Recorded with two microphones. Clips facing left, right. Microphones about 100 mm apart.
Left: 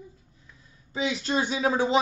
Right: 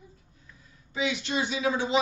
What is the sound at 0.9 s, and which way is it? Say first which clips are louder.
A man's voice: left 2 dB; 35° left (ahead or behind).